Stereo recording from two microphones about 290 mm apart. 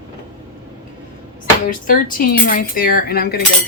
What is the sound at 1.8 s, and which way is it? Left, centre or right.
Speech, left.